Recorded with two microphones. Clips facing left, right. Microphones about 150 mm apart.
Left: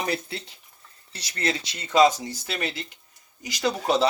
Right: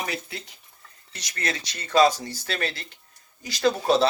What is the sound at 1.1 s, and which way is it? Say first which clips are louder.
Speech: left 3 dB; 30° left (ahead or behind).